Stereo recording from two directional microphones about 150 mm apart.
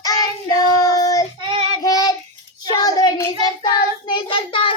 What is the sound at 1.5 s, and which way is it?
Child singing, 40° right (ahead or behind).